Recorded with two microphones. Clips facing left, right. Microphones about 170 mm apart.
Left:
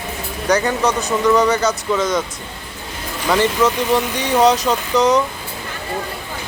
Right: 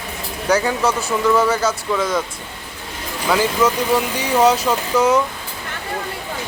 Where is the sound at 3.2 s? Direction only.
5° right (ahead or behind).